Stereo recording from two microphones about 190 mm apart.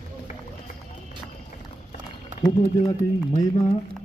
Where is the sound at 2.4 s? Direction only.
20° left (ahead or behind).